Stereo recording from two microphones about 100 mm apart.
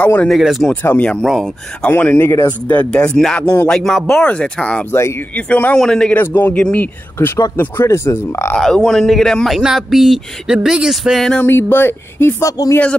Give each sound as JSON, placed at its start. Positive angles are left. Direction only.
{"t": 0.0, "sound": "a man's voice", "side_deg": 15}
{"t": 0.3, "sound": "speech", "side_deg": -5}
{"t": 0.8, "sound": "a man's voice", "side_deg": 15}
{"t": 1.2, "sound": "speech", "side_deg": 5}
{"t": 1.9, "sound": "speech", "side_deg": 20}
{"t": 2.7, "sound": "a man's voice", "side_deg": 10}
{"t": 6.1, "sound": "a man's voice", "side_deg": 20}
{"t": 7.2, "sound": "speech", "side_deg": 25}
{"t": 8.5, "sound": "speech", "side_deg": 5}
{"t": 11.3, "sound": "speech", "side_deg": 20}